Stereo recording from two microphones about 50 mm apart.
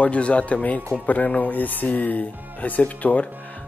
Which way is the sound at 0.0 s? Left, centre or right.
Left.